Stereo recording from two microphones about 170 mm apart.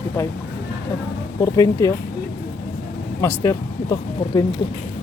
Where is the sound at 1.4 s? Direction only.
20° left (ahead or behind).